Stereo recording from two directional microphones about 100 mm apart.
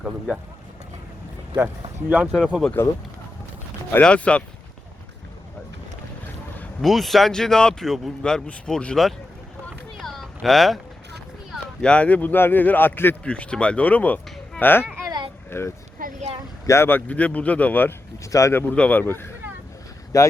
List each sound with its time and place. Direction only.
1.5 s speech: 20° right (ahead or behind)
2.2 s speech: 5° right (ahead or behind)
2.8 s speech: 20° left (ahead or behind)
4.0 s a man's voice: 10° left (ahead or behind)
6.8 s speech: centre (ahead or behind)
10.0 s a sound: centre (ahead or behind)
11.5 s a man's voice: 10° left (ahead or behind)
18.2 s speech: 30° left (ahead or behind)
18.7 s speech: 15° left (ahead or behind)
20.1 s speech: 35° left (ahead or behind)